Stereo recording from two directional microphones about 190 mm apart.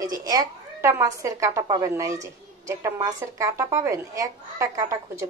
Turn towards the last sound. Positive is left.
turn(degrees=-15)  # may be behind; listen again after turning